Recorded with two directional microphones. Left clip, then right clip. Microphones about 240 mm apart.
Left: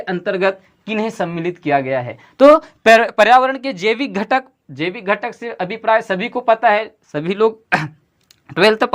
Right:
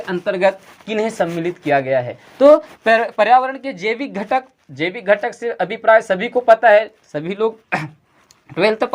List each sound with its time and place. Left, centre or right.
0.0 s speech: centre; by 4.4 s left
4.7 s speech: centre